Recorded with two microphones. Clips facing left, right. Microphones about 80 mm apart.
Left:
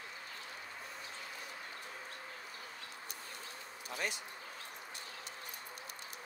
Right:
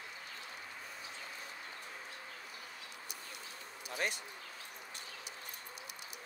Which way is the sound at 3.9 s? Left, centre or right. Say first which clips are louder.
Right 2 dB; right.